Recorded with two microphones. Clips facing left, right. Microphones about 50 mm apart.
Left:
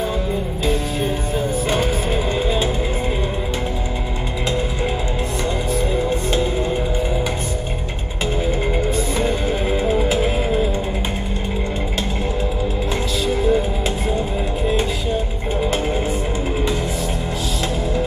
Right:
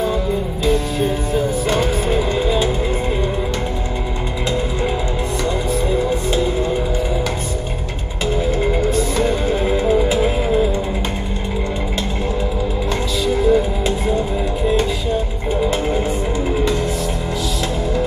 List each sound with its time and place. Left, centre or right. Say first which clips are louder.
0.7 s music: right 4 dB; left
5.9 s music: right 2 dB; left
8.6 s music: right 3 dB; centre
13.3 s music: right 3 dB; left